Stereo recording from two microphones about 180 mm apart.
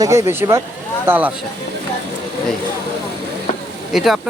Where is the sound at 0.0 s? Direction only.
15° right (ahead or behind).